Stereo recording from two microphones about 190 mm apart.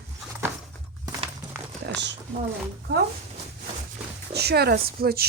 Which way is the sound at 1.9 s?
65° right (ahead or behind).